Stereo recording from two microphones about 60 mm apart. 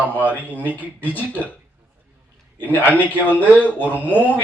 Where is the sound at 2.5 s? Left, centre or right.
Left.